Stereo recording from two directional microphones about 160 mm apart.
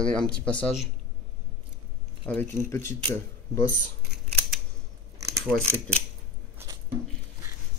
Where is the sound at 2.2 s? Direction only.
10° left (ahead or behind).